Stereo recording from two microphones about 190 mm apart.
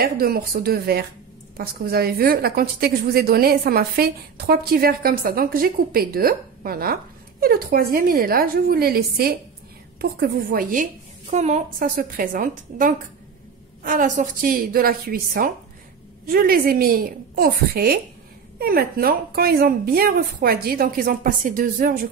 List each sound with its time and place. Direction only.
0.0 s a woman's voice: 50° right (ahead or behind)